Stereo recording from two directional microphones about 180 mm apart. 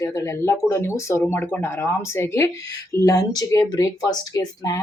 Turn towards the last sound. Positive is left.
turn(degrees=20)  # may be behind; listen again after turning